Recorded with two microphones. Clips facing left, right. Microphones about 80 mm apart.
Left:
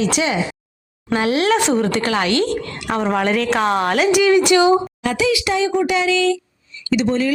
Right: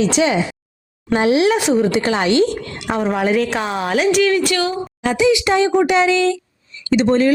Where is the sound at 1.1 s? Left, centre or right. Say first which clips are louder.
Right 2 dB; right.